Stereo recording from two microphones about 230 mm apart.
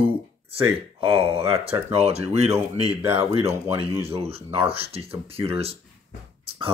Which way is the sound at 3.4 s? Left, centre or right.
Centre.